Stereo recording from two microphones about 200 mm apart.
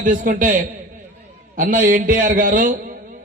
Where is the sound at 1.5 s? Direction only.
40° right (ahead or behind).